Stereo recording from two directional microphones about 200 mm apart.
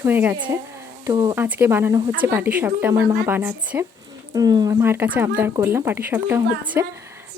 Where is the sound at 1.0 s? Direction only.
20° right (ahead or behind).